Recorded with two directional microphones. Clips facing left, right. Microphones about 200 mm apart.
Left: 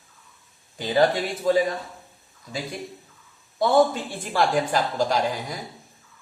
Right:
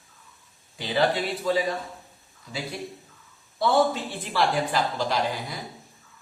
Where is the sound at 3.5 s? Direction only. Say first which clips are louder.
Left 3 dB; 45° left (ahead or behind).